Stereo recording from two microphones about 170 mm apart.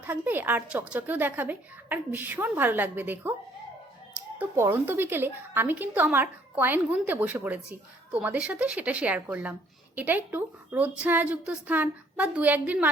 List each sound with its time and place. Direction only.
0.0 s a woman's voice: 10° right (ahead or behind)
4.4 s a woman's voice: 15° right (ahead or behind)